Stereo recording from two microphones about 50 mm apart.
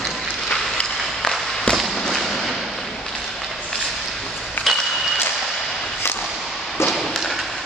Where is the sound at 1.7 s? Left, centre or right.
Centre.